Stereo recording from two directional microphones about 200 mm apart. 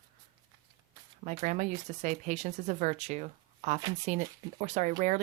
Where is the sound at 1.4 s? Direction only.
40° right (ahead or behind).